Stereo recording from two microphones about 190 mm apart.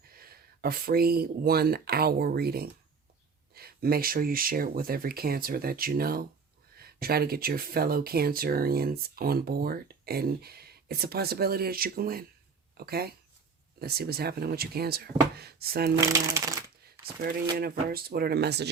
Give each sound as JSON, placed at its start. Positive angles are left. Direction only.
{"t": 0.1, "sound": "speech", "side_deg": -50}
{"t": 16.0, "sound": "speech", "side_deg": -15}
{"t": 17.2, "sound": "speech", "side_deg": -50}